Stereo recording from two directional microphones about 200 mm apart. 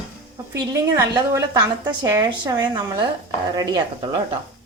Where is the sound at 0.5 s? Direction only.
15° right (ahead or behind).